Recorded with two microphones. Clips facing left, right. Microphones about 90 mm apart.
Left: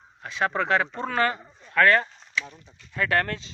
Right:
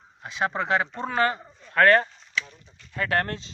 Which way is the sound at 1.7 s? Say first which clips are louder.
Right 2 dB; 40° right (ahead or behind).